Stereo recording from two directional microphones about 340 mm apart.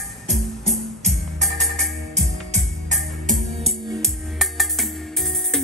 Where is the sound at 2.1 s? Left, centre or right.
Right.